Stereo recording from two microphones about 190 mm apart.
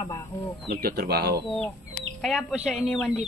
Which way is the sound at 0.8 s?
55° right (ahead or behind).